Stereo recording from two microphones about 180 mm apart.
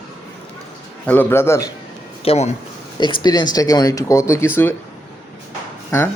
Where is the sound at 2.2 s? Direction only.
35° left (ahead or behind).